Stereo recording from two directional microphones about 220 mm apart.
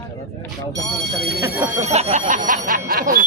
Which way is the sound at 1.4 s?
15° right (ahead or behind).